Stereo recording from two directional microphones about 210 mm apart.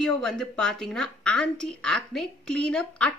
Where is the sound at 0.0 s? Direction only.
5° left (ahead or behind).